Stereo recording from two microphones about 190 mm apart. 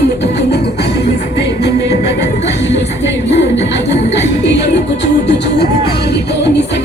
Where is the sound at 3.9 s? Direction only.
65° left (ahead or behind).